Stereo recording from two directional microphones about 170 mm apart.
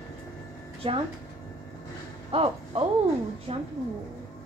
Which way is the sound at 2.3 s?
35° right (ahead or behind).